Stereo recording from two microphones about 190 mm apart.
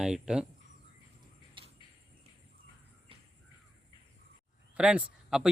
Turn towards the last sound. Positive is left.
turn(degrees=-5)  # may be behind; listen again after turning